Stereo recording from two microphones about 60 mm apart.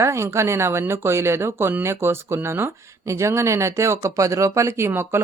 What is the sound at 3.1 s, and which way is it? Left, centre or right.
Speech, right.